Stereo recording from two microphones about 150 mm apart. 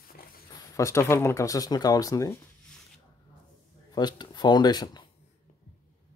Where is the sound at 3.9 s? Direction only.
30° left (ahead or behind).